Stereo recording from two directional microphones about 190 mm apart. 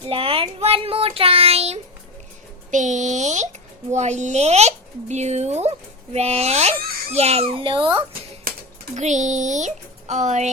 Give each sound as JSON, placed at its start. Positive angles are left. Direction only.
{"t": 0.0, "sound": "a child's voice", "side_deg": -30}
{"t": 8.5, "sound": "a sound", "side_deg": -50}
{"t": 9.0, "sound": "a child's voice", "side_deg": -40}